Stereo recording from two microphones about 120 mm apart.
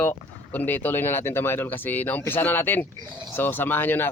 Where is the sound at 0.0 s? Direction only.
15° left (ahead or behind).